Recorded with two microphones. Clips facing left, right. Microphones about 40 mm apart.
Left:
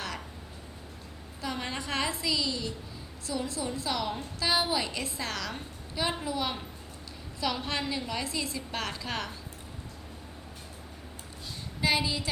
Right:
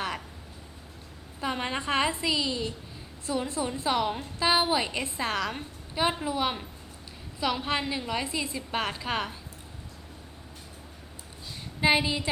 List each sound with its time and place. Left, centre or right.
1.4 s a woman's voice: right
11.8 s a woman's voice: right